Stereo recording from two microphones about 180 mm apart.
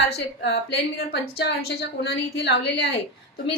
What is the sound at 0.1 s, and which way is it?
A woman's voice, 65° left (ahead or behind).